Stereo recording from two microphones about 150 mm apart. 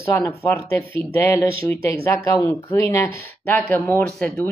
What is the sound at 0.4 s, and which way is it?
Speech, 15° left (ahead or behind).